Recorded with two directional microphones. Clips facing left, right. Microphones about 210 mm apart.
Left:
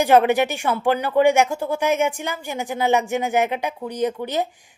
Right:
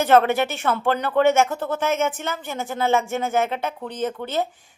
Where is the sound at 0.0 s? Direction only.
15° left (ahead or behind).